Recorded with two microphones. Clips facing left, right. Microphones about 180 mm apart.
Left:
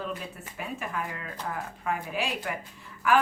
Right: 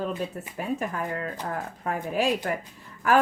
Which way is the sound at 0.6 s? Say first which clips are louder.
Right 5 dB; 40° right (ahead or behind).